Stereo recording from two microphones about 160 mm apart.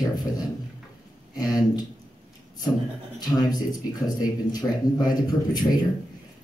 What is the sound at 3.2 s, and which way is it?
Speech, 25° left (ahead or behind).